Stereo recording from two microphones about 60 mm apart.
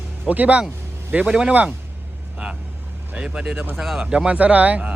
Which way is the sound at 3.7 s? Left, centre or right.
Centre.